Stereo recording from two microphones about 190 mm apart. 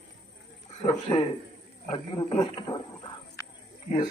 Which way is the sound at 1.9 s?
25° left (ahead or behind).